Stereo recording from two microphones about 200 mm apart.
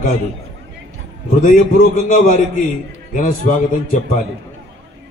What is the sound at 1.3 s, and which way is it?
A man's voice, 40° left (ahead or behind).